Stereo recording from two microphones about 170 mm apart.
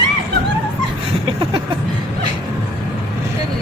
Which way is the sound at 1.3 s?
30° right (ahead or behind).